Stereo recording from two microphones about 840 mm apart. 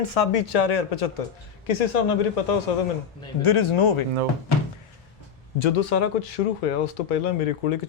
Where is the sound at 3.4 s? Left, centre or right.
Left.